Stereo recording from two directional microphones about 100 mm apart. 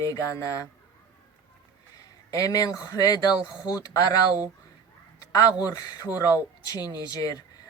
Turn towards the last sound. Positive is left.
turn(degrees=40)  # may be behind; listen again after turning